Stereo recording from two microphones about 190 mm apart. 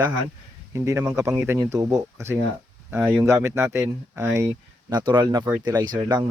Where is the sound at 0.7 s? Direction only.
15° right (ahead or behind).